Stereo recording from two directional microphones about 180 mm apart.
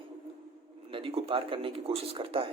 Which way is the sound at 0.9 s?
30° right (ahead or behind).